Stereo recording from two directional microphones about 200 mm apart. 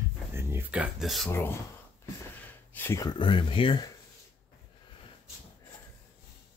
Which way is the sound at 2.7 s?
10° left (ahead or behind).